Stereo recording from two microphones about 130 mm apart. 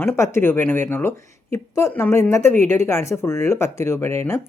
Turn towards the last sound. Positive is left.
turn(degrees=20)  # may be behind; listen again after turning